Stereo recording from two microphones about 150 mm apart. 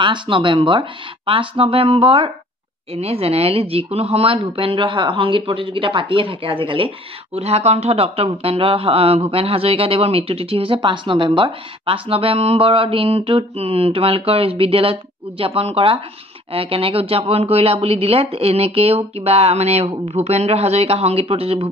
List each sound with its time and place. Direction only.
0.0 s speech: 35° right (ahead or behind)